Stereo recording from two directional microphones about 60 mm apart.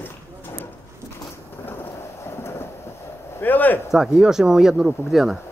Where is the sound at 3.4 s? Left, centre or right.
Left.